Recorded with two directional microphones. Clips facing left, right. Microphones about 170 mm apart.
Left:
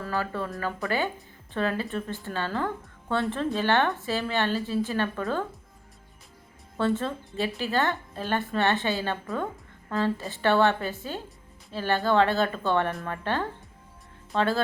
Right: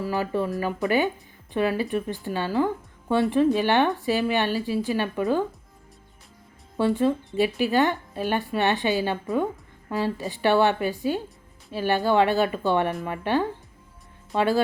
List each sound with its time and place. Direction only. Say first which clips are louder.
0.0 s speech: right 5 dB; 15° right (ahead or behind)
6.7 s speech: right 5 dB; 15° right (ahead or behind)